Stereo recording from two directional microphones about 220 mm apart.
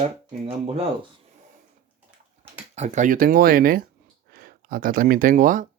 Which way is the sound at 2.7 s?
30° right (ahead or behind).